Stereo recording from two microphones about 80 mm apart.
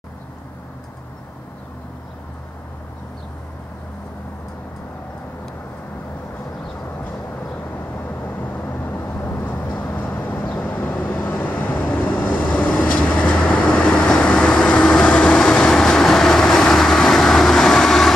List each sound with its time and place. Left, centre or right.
8.0 s vehicle: left; by 18.1 s centre